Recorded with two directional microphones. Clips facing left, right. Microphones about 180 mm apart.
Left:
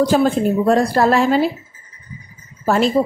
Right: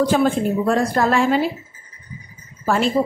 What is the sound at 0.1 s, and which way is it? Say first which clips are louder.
Speech: left 2 dB; 35° left (ahead or behind).